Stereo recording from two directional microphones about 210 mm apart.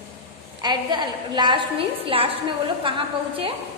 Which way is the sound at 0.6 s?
20° right (ahead or behind).